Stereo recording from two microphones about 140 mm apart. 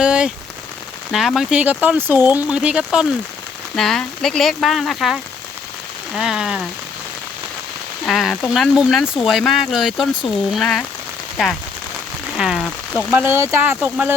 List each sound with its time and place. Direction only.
0.0 s rain on surface: 5° right (ahead or behind)
1.1 s speech: centre (ahead or behind)
8.0 s speech: centre (ahead or behind)
12.4 s a sound: centre (ahead or behind)
13.1 s speech: 15° right (ahead or behind)